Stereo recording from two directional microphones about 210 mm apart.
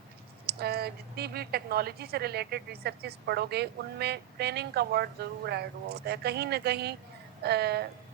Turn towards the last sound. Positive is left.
turn(degrees=-50)  # may be behind; listen again after turning